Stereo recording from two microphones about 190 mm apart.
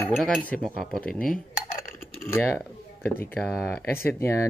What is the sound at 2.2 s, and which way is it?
Speech, 15° left (ahead or behind).